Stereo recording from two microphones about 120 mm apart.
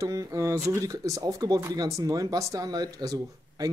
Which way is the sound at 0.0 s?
30° right (ahead or behind).